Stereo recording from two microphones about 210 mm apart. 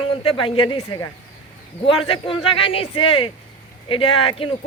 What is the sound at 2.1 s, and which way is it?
Speech, 25° left (ahead or behind).